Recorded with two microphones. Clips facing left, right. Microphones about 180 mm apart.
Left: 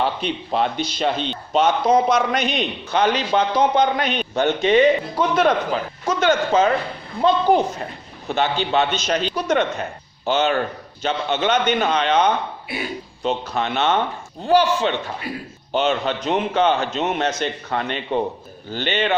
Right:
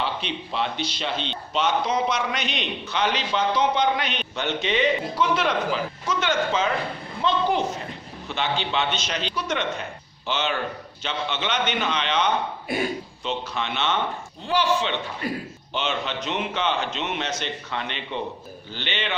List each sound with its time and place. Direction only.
0.0 s a man's voice: 45° left (ahead or behind)
12.7 s a man's voice: 45° right (ahead or behind)
13.2 s a man's voice: 45° left (ahead or behind)
15.3 s a man's voice: 45° right (ahead or behind)
15.7 s a man's voice: 45° left (ahead or behind)